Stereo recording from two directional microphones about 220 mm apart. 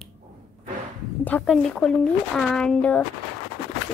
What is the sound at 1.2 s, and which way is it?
Speech, 5° left (ahead or behind).